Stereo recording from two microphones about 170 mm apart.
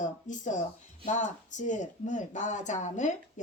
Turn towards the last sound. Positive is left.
turn(degrees=45)  # may be behind; listen again after turning